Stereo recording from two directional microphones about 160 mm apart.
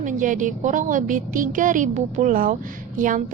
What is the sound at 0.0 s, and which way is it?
A woman's voice, 55° right (ahead or behind).